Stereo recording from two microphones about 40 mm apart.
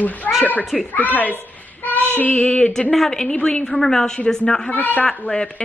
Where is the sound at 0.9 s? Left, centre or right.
Left.